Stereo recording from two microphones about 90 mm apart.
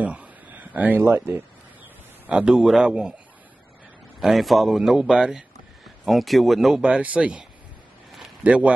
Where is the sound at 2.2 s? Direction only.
10° right (ahead or behind).